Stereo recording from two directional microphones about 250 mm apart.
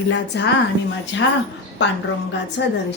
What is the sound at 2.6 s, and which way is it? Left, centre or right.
Speech, left.